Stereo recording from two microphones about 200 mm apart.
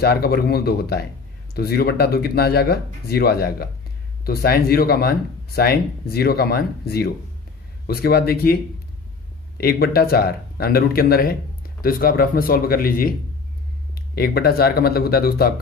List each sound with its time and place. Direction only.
0.0 s speech: 50° left (ahead or behind)
9.6 s speech: 50° left (ahead or behind)
14.1 s speech: 50° left (ahead or behind)